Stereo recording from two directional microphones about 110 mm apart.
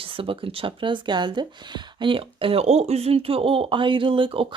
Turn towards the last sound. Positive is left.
turn(degrees=-50)  # may be behind; listen again after turning